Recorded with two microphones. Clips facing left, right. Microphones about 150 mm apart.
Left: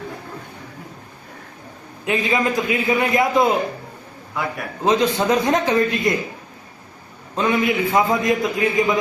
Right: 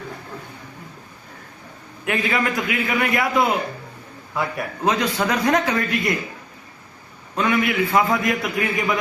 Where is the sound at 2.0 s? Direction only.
20° left (ahead or behind).